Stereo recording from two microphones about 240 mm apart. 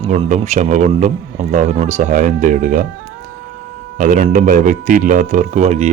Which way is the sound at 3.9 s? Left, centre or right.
Right.